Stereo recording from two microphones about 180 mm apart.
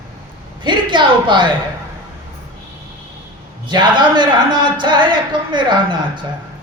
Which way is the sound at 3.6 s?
25° right (ahead or behind).